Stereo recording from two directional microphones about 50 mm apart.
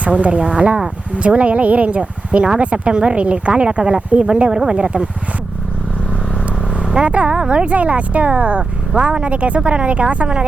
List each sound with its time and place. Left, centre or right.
0.0 s speech: right
6.8 s speech: right